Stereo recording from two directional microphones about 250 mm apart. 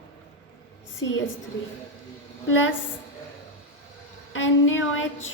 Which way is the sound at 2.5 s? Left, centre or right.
Left.